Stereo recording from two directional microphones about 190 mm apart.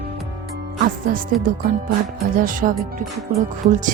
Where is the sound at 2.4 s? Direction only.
45° right (ahead or behind).